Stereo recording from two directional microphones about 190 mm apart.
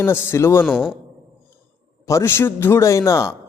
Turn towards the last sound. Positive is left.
turn(degrees=15)  # may be behind; listen again after turning